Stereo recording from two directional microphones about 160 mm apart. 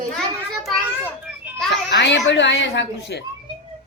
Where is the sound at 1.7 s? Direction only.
90° left.